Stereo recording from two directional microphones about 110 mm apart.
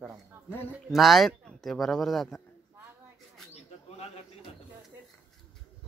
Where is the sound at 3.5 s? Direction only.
70° left (ahead or behind).